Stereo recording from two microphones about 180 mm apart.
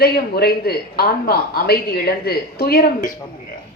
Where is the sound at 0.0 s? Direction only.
60° left (ahead or behind).